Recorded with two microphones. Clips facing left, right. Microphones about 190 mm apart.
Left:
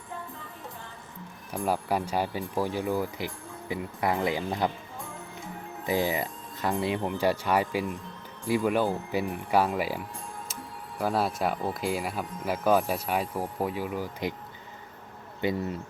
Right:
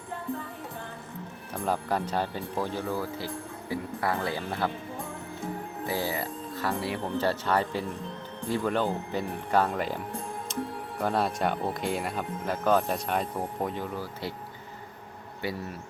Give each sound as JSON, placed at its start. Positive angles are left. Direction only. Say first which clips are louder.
{"t": 1.5, "sound": "speech", "louder": "left 1 dB", "side_deg": 10}
{"t": 5.8, "sound": "speech", "louder": "left 4 dB", "side_deg": 15}
{"t": 11.0, "sound": "speech", "louder": "even", "side_deg": 5}
{"t": 15.4, "sound": "speech", "louder": "left 5 dB", "side_deg": 20}